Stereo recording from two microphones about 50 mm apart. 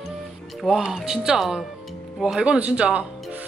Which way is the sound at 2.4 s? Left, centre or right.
Right.